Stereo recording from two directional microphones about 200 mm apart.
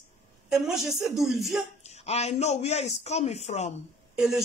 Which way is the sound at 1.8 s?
30° left (ahead or behind).